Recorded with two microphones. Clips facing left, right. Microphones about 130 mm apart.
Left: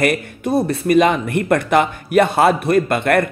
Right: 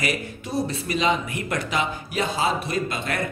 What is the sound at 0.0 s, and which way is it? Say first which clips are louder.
Speech: left 9 dB; 55° left (ahead or behind).